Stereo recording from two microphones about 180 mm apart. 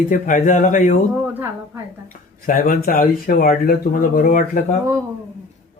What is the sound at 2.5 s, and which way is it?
Speech, 50° left (ahead or behind).